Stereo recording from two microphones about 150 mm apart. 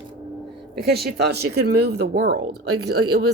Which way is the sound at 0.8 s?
90° right.